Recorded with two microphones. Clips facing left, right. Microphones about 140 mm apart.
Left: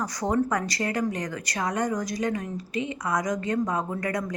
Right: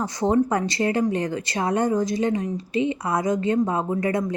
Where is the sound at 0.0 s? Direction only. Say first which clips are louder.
Right 5 dB; 25° right (ahead or behind).